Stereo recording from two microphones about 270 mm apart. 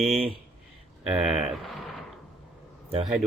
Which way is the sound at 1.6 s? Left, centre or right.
Centre.